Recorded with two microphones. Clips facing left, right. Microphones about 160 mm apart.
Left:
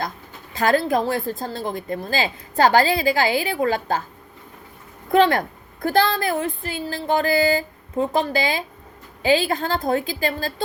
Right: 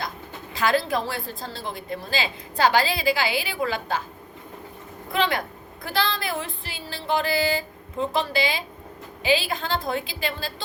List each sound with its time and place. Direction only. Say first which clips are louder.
0.5 s a woman's voice: left 4 dB; 45° left (ahead or behind)
5.1 s a woman's voice: left 8 dB; 50° left (ahead or behind)